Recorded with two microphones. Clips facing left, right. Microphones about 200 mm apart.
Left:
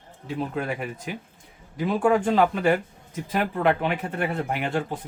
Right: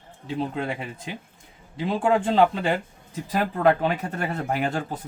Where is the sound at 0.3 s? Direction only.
25° right (ahead or behind).